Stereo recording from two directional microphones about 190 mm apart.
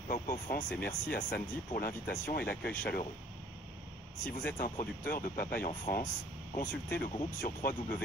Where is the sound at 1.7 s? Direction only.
50° left (ahead or behind).